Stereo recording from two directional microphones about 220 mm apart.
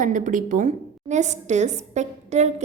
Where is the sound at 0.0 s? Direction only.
35° right (ahead or behind).